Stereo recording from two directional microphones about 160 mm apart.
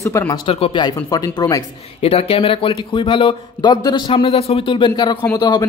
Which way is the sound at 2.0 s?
35° left (ahead or behind).